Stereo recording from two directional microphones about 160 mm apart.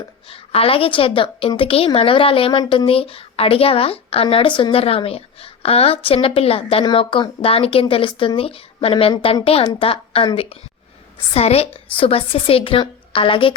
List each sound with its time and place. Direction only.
0.3 s a woman's voice: 35° left (ahead or behind)